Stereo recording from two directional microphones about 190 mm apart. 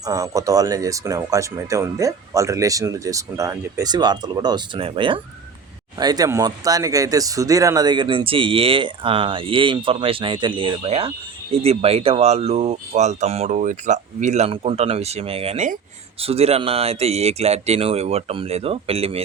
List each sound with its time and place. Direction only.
0.0 s speech: 20° right (ahead or behind)